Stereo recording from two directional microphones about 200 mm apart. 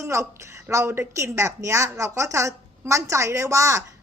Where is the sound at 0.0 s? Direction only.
15° right (ahead or behind).